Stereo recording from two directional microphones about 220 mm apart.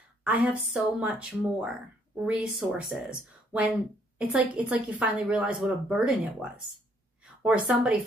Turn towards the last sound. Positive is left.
turn(degrees=-5)  # may be behind; listen again after turning